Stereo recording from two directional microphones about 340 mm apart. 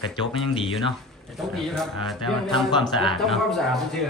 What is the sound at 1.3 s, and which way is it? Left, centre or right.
Speech, centre.